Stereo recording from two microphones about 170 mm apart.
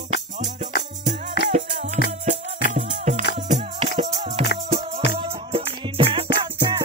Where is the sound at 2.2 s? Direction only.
45° right (ahead or behind).